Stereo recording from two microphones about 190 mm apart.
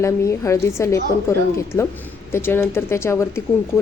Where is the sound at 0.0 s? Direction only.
15° left (ahead or behind).